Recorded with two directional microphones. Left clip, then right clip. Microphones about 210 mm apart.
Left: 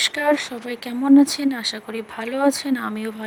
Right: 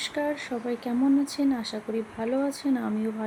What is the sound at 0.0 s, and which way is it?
Speech, 55° left (ahead or behind).